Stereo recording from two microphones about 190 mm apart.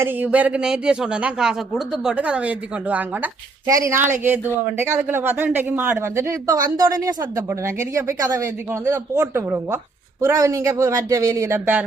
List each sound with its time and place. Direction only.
0.0 s speech: 10° right (ahead or behind)